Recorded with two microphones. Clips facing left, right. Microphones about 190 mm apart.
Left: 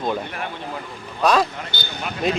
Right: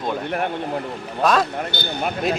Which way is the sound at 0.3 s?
55° right (ahead or behind).